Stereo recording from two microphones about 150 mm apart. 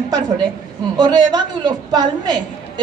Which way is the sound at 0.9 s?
30° right (ahead or behind).